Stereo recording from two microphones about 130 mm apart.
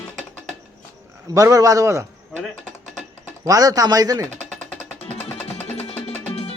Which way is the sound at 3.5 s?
30° right (ahead or behind).